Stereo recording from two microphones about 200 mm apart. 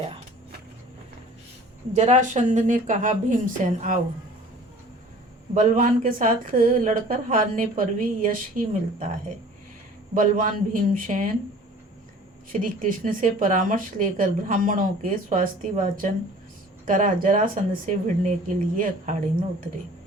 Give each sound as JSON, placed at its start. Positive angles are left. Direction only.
{"t": 1.9, "sound": "speech", "side_deg": -35}
{"t": 5.5, "sound": "speech", "side_deg": -40}
{"t": 10.2, "sound": "speech", "side_deg": -40}
{"t": 12.5, "sound": "speech", "side_deg": -40}